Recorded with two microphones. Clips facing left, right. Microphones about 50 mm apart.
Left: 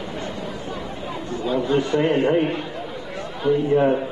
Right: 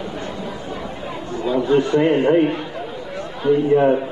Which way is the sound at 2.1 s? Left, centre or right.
Right.